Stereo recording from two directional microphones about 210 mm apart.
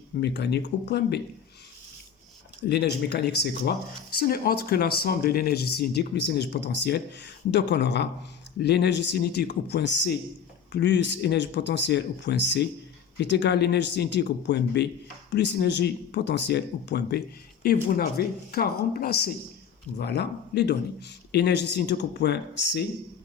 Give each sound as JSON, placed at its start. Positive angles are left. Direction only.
{"t": 0.2, "sound": "speech", "side_deg": 55}
{"t": 2.6, "sound": "speech", "side_deg": 50}